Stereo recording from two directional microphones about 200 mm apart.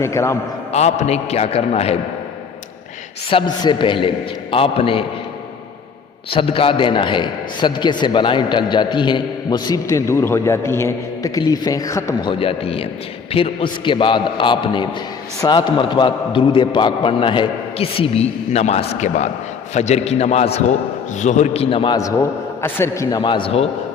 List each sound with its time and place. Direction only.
0.0 s a man's voice: 15° left (ahead or behind)
0.7 s a man's voice: 35° left (ahead or behind)
3.2 s a man's voice: 25° left (ahead or behind)
6.3 s a man's voice: 25° left (ahead or behind)